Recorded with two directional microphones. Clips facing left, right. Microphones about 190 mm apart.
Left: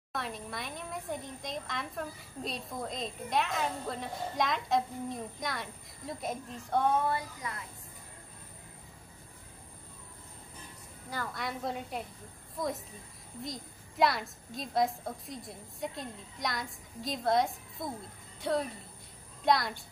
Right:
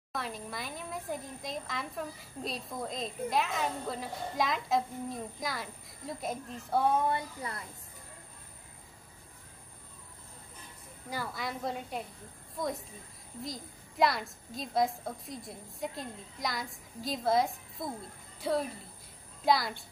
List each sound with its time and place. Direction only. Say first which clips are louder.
0.1 s a child's voice: even; centre (ahead or behind)
7.1 s speech: right 1 dB; 25° right (ahead or behind)
11.3 s a child's voice: left 1 dB; centre (ahead or behind)